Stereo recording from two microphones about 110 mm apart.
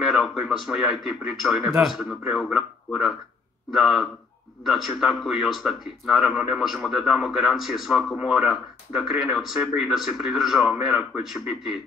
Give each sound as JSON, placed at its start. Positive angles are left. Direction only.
{"t": 0.0, "sound": "a man's voice", "side_deg": 0}